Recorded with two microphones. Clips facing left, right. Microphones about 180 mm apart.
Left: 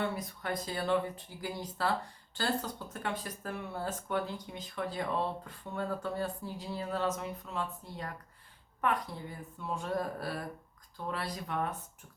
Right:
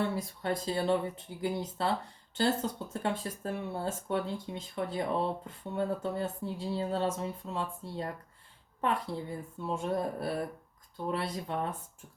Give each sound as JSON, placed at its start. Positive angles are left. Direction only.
{"t": 0.2, "sound": "speech", "side_deg": -30}